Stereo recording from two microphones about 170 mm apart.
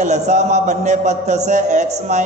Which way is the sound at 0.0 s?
45° right (ahead or behind).